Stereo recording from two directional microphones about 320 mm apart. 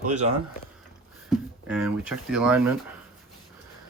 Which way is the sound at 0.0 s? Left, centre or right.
Right.